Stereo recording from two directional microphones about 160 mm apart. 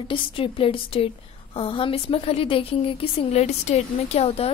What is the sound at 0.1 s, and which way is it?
A woman's voice, 35° left (ahead or behind).